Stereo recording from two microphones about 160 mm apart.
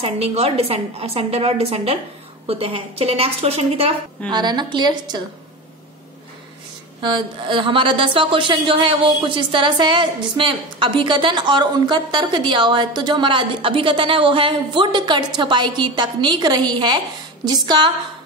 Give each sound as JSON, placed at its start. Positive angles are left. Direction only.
{"t": 0.0, "sound": "a woman's voice", "side_deg": -40}
{"t": 4.3, "sound": "a woman's voice", "side_deg": -25}
{"t": 7.0, "sound": "a woman's voice", "side_deg": -30}